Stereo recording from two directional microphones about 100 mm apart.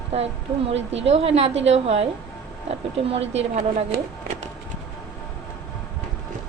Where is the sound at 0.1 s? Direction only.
90° right.